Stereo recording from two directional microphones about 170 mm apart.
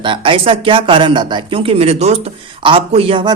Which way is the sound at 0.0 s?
30° right (ahead or behind).